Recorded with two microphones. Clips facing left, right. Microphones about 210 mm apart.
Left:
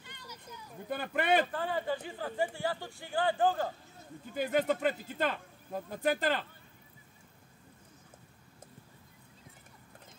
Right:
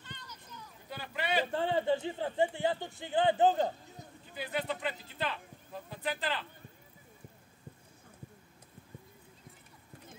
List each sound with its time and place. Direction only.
0.0 s a sound: 10° left (ahead or behind)
0.7 s speech: 55° left (ahead or behind)
1.5 s speech: 25° right (ahead or behind)
4.3 s speech: 45° left (ahead or behind)